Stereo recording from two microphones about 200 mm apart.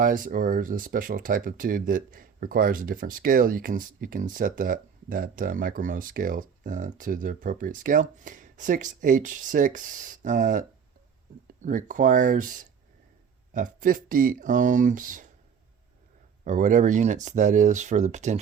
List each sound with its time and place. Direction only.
0.0 s speech: 45° right (ahead or behind)
13.5 s speech: 40° right (ahead or behind)
16.4 s speech: 40° right (ahead or behind)